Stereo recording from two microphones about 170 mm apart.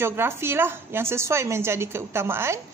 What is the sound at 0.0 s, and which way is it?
Speech, 15° right (ahead or behind).